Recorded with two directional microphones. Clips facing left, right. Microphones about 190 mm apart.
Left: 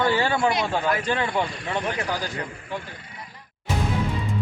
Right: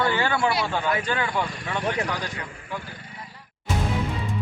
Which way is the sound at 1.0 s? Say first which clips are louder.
Left 2 dB; 30° left (ahead or behind).